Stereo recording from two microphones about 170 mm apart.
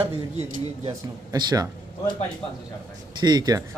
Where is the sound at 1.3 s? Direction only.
20° right (ahead or behind).